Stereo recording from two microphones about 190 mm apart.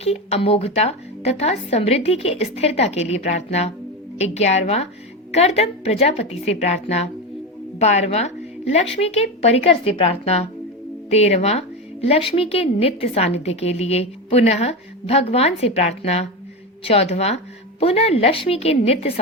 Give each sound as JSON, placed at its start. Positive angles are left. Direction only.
{"t": 0.0, "sound": "a woman's voice", "side_deg": 30}